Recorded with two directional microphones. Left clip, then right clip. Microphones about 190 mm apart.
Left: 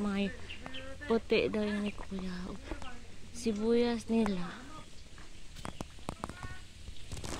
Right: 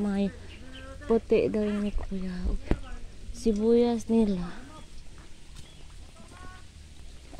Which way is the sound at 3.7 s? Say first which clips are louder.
Right 6 dB; 50° right (ahead or behind).